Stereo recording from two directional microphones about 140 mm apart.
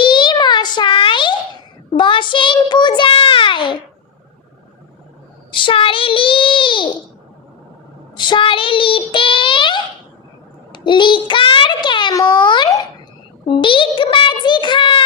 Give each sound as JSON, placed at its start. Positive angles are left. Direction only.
{"t": 0.0, "sound": "a sound", "side_deg": 35}
{"t": 5.5, "sound": "child singing", "side_deg": 35}
{"t": 8.1, "sound": "child singing", "side_deg": 35}
{"t": 10.7, "sound": "a child's voice", "side_deg": 35}